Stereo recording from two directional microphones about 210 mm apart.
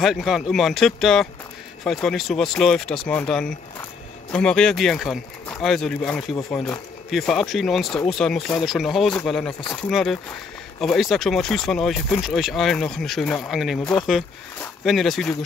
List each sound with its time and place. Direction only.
0.0 s speech: centre (ahead or behind)